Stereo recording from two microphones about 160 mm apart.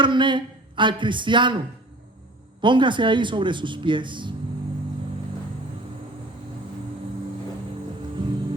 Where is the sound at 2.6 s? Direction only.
30° right (ahead or behind).